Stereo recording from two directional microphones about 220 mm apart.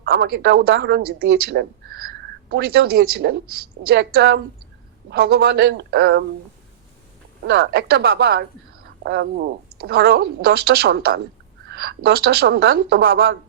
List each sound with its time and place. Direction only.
0.0 s speech: 45° right (ahead or behind)
7.4 s speech: 50° right (ahead or behind)